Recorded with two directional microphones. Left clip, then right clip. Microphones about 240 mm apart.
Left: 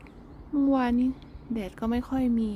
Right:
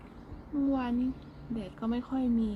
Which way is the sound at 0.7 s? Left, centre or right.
Centre.